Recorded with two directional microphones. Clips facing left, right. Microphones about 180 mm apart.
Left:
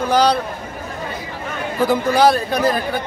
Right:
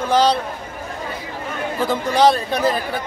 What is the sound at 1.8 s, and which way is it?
A man's voice, 5° left (ahead or behind).